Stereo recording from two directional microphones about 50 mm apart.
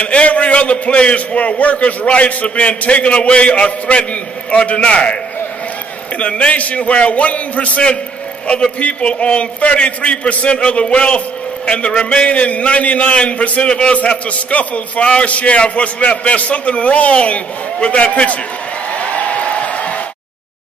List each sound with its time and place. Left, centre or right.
0.0 s a man's voice: left
6.1 s a man's voice: left
18.9 s a sound: left